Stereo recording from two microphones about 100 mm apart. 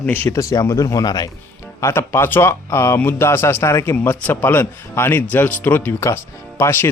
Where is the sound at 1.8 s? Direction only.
25° left (ahead or behind).